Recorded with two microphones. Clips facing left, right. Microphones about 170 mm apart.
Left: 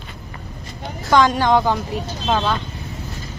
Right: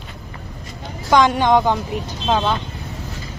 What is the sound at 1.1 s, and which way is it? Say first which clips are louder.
A woman's voice: right 1 dB; 15° right (ahead or behind).